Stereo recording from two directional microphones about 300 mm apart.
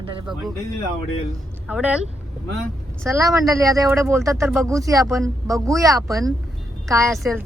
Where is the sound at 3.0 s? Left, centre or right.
Centre.